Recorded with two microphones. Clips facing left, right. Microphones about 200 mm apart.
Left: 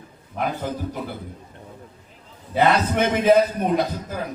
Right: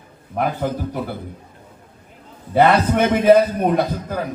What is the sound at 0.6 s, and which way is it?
Speech, 55° right (ahead or behind).